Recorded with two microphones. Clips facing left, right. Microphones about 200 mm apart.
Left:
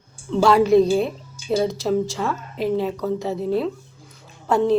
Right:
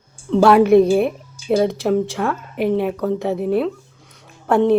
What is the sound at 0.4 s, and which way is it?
A woman's voice, 60° right (ahead or behind).